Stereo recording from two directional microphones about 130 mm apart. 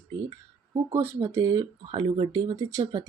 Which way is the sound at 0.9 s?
20° right (ahead or behind).